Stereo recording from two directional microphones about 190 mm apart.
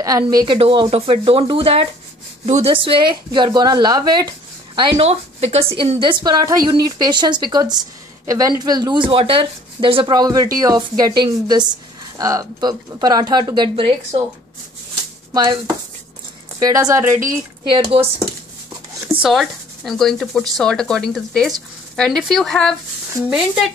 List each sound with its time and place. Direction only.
0.0 s speech: 20° right (ahead or behind)
15.3 s speech: 25° right (ahead or behind)
17.6 s speech: 25° right (ahead or behind)
19.2 s speech: centre (ahead or behind)